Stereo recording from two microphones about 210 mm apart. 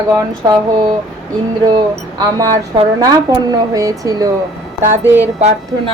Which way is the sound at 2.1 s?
20° right (ahead or behind).